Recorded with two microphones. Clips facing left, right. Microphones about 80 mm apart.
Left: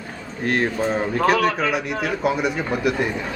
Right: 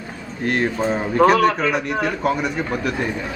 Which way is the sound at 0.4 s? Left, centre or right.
Centre.